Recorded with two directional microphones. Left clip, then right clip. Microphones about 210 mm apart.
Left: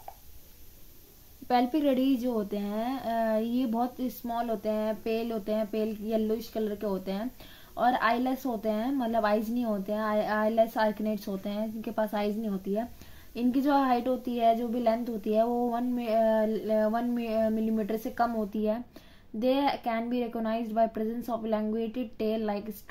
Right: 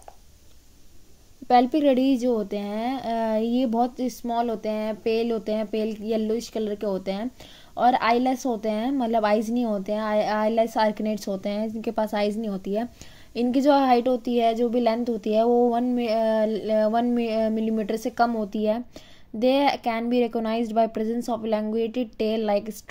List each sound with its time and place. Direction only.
1.5 s a woman's voice: 25° right (ahead or behind)